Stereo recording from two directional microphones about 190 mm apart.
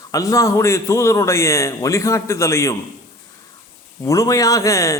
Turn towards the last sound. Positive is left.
turn(degrees=15)  # may be behind; listen again after turning